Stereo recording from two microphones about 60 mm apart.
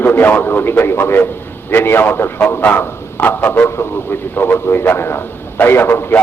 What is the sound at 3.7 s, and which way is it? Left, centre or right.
Speech, left.